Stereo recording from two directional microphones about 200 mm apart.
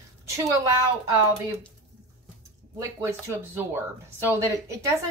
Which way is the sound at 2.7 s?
15° right (ahead or behind).